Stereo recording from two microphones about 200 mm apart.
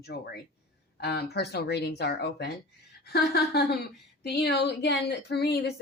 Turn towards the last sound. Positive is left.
turn(degrees=55)  # may be behind; listen again after turning